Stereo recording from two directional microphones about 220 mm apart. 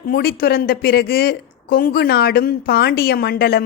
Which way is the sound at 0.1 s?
45° left (ahead or behind).